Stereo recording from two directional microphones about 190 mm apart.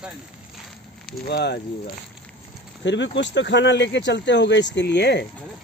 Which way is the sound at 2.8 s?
70° left (ahead or behind).